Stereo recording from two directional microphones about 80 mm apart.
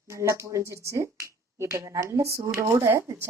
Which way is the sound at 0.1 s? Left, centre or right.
Right.